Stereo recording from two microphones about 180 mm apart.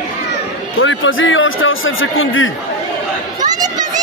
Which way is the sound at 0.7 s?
90° left.